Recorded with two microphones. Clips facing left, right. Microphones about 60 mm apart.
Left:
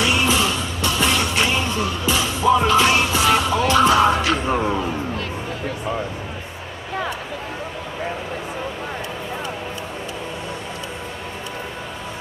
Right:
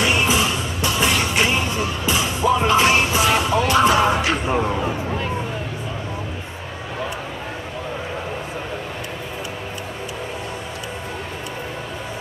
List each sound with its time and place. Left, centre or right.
0.0 s music: right